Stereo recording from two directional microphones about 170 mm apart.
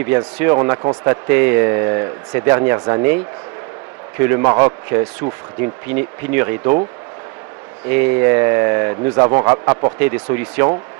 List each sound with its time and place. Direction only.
0.0 s speech: 15° right (ahead or behind)
4.2 s speech: 15° right (ahead or behind)
7.9 s speech: 10° right (ahead or behind)